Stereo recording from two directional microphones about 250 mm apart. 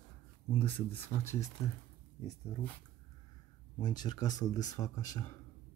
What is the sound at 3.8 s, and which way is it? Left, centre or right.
Speech, centre.